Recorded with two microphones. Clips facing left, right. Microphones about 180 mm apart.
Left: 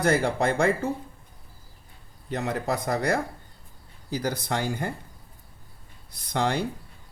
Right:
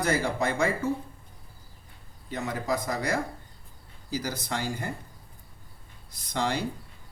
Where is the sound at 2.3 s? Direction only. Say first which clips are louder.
Left 2 dB; 65° left (ahead or behind).